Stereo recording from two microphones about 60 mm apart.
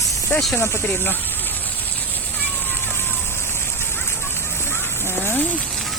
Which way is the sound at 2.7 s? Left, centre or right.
Left.